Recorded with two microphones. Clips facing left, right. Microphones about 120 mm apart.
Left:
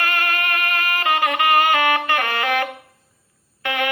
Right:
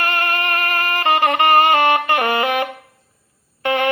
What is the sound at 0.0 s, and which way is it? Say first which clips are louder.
Music: right 2 dB; 30° right (ahead or behind).